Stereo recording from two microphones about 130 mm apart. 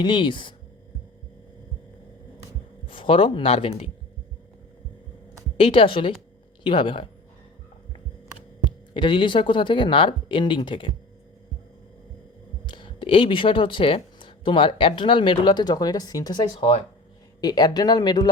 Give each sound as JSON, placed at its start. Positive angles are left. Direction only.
{"t": 0.0, "sound": "speech", "side_deg": 40}
{"t": 2.8, "sound": "speech", "side_deg": 40}
{"t": 5.5, "sound": "speech", "side_deg": 45}
{"t": 8.6, "sound": "speech", "side_deg": 40}
{"t": 12.6, "sound": "speech", "side_deg": 40}